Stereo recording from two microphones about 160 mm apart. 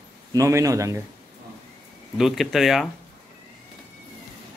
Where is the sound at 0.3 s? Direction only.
20° right (ahead or behind).